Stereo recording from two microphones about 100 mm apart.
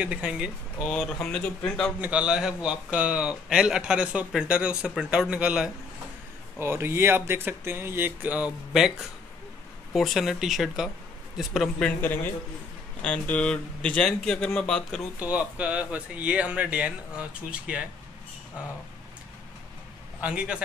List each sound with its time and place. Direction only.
0.0 s a man's voice: 10° right (ahead or behind)
0.8 s speech: 5° left (ahead or behind)
2.0 s a man's voice: 10° right (ahead or behind)
6.6 s speech: 25° right (ahead or behind)
8.7 s speech: 5° right (ahead or behind)
11.8 s a man's voice: 20° left (ahead or behind)
15.1 s a man's voice: 15° right (ahead or behind)
20.2 s a man's voice: 10° right (ahead or behind)